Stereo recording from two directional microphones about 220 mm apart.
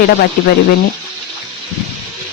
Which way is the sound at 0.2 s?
45° left (ahead or behind).